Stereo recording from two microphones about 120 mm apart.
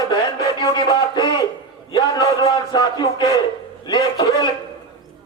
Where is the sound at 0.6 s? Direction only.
40° left (ahead or behind).